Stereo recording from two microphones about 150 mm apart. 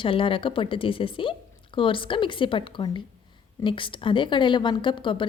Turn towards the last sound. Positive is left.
turn(degrees=35)  # may be behind; listen again after turning